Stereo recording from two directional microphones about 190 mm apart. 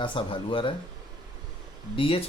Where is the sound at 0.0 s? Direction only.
25° left (ahead or behind).